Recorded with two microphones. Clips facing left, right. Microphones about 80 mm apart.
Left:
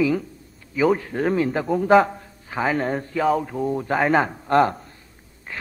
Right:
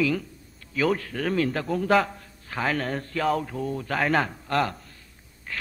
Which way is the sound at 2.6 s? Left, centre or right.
Centre.